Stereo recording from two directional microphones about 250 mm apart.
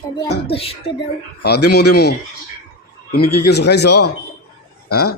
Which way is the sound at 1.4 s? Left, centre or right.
Left.